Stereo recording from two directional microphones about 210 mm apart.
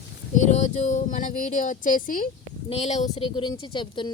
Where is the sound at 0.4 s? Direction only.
35° left (ahead or behind).